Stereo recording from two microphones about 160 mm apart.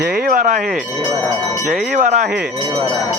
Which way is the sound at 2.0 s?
55° right (ahead or behind).